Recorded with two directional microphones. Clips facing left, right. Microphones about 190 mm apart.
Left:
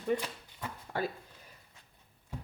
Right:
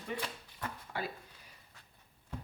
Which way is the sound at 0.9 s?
45° left (ahead or behind).